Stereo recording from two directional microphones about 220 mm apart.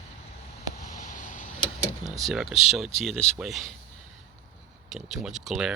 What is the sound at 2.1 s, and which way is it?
Speech, centre (ahead or behind).